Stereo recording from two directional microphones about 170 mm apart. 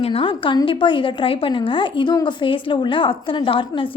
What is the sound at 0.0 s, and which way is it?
A woman's voice, 30° left (ahead or behind).